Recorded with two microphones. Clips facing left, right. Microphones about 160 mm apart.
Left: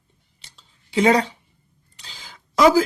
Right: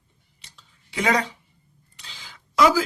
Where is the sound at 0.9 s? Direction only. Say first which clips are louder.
Left 6 dB; 30° left (ahead or behind).